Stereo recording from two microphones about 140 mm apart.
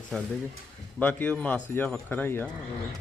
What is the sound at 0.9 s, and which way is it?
Speech, 10° left (ahead or behind).